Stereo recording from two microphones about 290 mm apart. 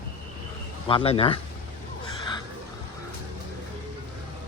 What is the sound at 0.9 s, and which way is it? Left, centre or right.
Speech, centre.